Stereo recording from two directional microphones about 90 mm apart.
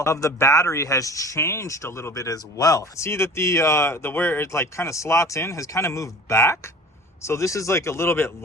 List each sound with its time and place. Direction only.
0.0 s speech: 35° left (ahead or behind)
3.1 s speech: 30° left (ahead or behind)